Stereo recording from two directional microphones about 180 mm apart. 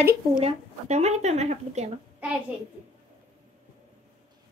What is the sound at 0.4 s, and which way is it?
Speech, 35° right (ahead or behind).